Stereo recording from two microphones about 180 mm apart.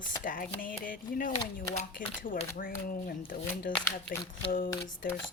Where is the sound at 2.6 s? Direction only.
50° left (ahead or behind).